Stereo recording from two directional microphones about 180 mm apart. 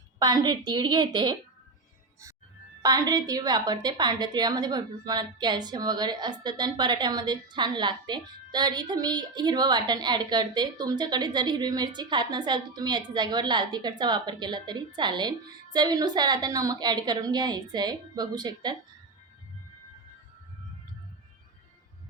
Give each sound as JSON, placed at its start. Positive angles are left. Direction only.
{"t": 0.2, "sound": "a woman's voice", "side_deg": -20}
{"t": 2.8, "sound": "a woman's voice", "side_deg": -20}